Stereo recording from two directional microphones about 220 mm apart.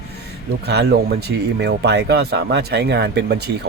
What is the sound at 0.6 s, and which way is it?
Speech, 50° right (ahead or behind).